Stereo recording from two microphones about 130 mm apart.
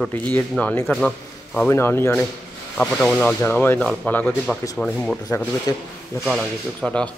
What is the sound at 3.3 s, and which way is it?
Speech, 15° left (ahead or behind).